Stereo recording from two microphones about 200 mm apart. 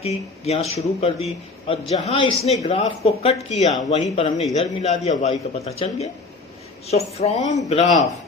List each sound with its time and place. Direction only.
0.0 s a man's voice: 30° left (ahead or behind)